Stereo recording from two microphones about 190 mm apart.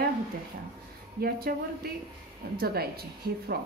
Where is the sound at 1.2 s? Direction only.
50° right (ahead or behind).